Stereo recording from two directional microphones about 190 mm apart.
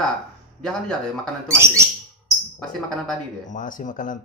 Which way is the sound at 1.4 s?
15° right (ahead or behind).